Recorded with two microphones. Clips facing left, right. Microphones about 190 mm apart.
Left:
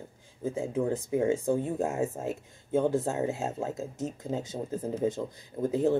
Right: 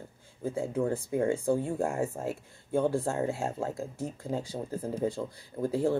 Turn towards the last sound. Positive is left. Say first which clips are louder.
# left 2 dB
turn(degrees=20)  # may be behind; listen again after turning